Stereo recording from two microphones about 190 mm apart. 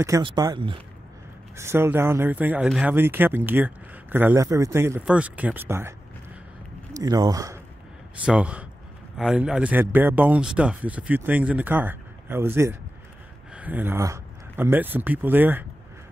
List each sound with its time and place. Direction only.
0.0 s speech: 15° right (ahead or behind)
1.6 s speech: 15° right (ahead or behind)
8.3 s speech: 5° right (ahead or behind)